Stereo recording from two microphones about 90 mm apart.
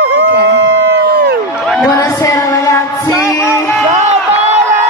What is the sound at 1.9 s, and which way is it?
Music, 35° left (ahead or behind).